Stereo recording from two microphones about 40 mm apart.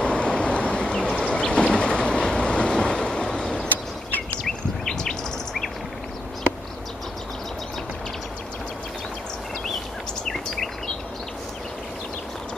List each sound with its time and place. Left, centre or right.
0.0 s vehicle: left
4.5 s bird: centre
10.2 s a sound: centre